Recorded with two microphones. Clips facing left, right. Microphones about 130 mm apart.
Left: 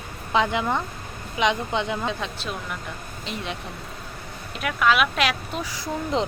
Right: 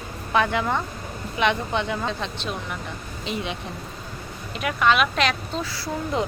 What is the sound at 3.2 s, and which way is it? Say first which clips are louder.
Speech: right 3 dB; centre (ahead or behind).